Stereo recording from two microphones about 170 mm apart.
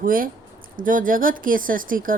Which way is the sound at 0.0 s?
55° right (ahead or behind).